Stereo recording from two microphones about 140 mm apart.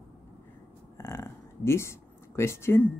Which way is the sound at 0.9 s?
20° left (ahead or behind).